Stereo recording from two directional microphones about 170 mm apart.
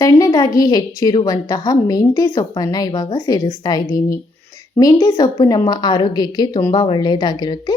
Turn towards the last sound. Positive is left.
turn(degrees=25)  # may be behind; listen again after turning